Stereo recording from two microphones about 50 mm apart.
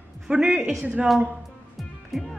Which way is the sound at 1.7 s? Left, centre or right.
Centre.